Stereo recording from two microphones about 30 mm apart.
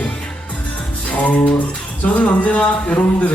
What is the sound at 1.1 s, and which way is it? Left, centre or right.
Music, left.